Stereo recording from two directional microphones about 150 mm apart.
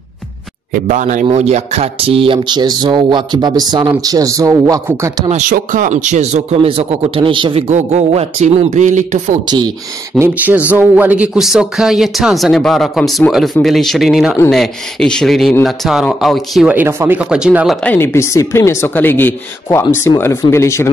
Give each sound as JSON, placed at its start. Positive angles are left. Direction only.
{"t": 0.8, "sound": "a man's voice", "side_deg": -55}
{"t": 5.3, "sound": "speech", "side_deg": -60}
{"t": 10.1, "sound": "speech", "side_deg": -15}
{"t": 16.7, "sound": "speech", "side_deg": -15}
{"t": 17.8, "sound": "speech", "side_deg": 15}